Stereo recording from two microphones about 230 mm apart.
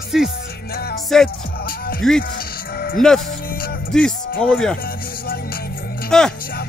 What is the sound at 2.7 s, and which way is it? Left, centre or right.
Music, left.